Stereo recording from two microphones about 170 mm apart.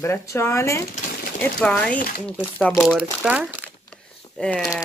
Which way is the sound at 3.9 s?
5° left (ahead or behind).